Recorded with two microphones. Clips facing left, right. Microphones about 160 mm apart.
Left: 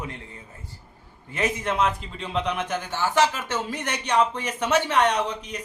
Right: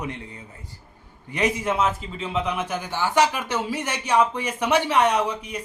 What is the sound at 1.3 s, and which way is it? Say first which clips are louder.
Speech: right 2 dB; 10° right (ahead or behind).